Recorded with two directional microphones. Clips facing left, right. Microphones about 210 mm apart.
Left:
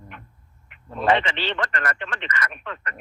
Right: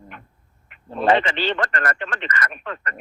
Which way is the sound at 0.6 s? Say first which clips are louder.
Right 2 dB; 35° right (ahead or behind).